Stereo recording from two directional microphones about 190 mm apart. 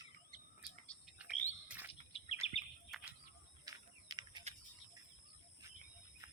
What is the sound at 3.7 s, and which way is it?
Typing, 25° right (ahead or behind).